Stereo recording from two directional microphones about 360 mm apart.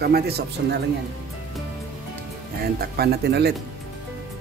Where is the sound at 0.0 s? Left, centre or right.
Right.